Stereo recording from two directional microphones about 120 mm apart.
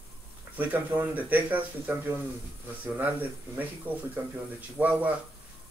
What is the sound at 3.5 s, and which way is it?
Speech, 15° right (ahead or behind).